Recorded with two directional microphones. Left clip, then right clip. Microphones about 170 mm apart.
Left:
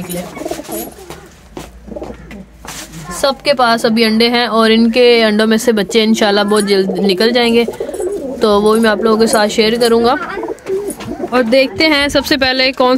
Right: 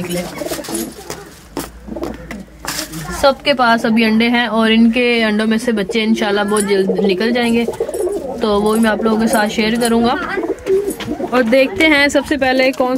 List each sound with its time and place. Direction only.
3.4 s a woman's voice: 15° left (ahead or behind)
11.2 s speech: 5° left (ahead or behind)